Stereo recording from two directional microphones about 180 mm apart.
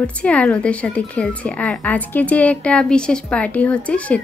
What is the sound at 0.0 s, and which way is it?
Speech, 5° left (ahead or behind).